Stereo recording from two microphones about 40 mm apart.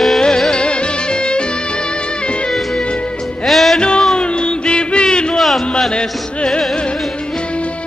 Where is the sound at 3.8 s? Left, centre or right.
Left.